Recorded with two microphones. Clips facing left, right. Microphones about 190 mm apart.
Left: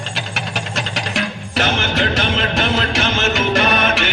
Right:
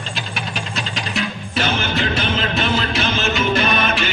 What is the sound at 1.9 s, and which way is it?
Music, 80° left.